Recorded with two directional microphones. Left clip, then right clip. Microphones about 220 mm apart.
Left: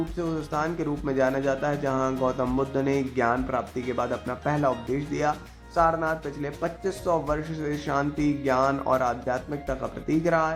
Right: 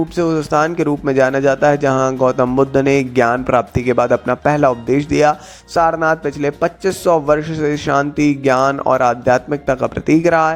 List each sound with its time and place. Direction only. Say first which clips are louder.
0.2 s a man's voice: right 15 dB; 35° right (ahead or behind)